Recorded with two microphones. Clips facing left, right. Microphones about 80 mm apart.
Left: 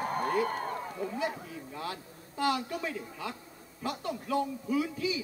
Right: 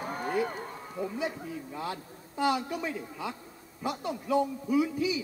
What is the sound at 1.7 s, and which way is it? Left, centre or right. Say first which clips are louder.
A man's voice: even; centre.